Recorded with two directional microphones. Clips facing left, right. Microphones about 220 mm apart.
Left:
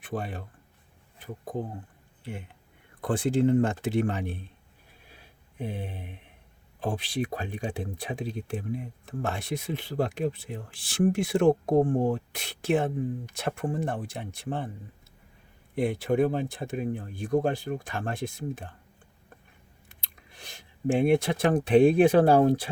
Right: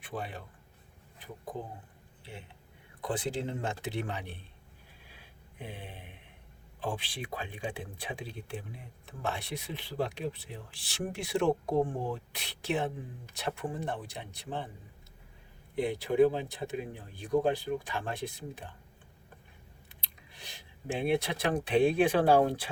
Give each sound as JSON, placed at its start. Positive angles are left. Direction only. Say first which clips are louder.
{"t": 0.0, "sound": "speech", "louder": "left 5 dB", "side_deg": 45}
{"t": 3.0, "sound": "speech", "louder": "left 9 dB", "side_deg": 50}
{"t": 5.5, "sound": "speech", "louder": "left 9 dB", "side_deg": 45}
{"t": 15.7, "sound": "speech", "louder": "left 4 dB", "side_deg": 50}
{"t": 19.9, "sound": "speech", "louder": "left 1 dB", "side_deg": 45}